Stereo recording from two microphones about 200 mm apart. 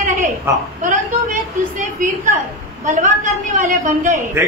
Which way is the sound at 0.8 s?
40° right (ahead or behind).